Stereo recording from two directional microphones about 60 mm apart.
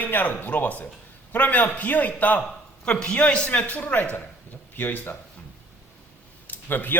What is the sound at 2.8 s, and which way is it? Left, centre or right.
A man's voice, centre.